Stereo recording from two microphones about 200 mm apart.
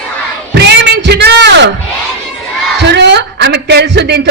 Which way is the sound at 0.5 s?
60° right (ahead or behind).